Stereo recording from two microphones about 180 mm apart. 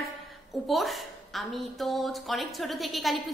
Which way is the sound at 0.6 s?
Centre (ahead or behind).